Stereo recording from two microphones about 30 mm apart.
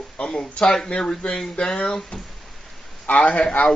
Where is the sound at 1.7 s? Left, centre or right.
Left.